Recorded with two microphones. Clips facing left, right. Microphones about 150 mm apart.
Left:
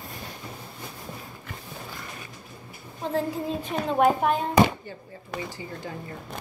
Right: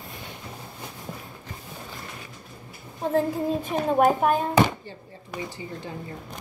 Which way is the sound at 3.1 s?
50° right (ahead or behind).